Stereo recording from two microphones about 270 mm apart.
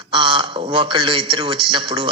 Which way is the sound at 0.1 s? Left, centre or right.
Centre.